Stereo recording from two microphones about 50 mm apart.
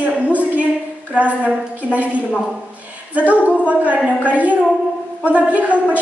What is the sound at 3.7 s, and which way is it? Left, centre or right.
A woman's voice, right.